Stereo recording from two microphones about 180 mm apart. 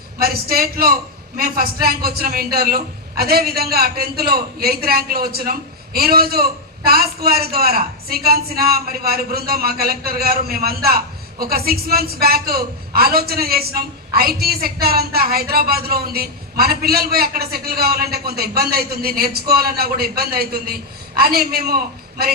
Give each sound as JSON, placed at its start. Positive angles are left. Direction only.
{"t": 0.2, "sound": "a man's voice", "side_deg": -55}